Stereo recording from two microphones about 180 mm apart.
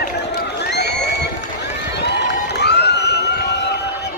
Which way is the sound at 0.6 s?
70° left (ahead or behind).